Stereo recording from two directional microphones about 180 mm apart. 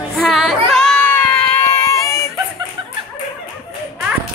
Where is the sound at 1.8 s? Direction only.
15° left (ahead or behind).